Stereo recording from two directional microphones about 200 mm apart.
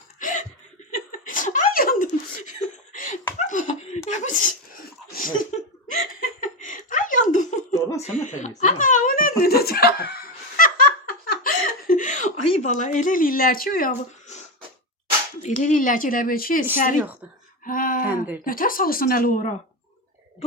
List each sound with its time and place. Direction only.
0.2 s chuckle: 40° left (ahead or behind)
3.3 s laughter: 40° left (ahead or behind)
7.7 s laughter: 15° left (ahead or behind)
8.0 s chuckle: 35° left (ahead or behind); by 10.2 s 55° left (ahead or behind)
11.3 s chuckle: 45° left (ahead or behind)
15.4 s speech: 35° left (ahead or behind)
17.7 s a sound: 45° left (ahead or behind)
18.0 s a sound: 10° right (ahead or behind)
18.4 s speech: 45° left (ahead or behind)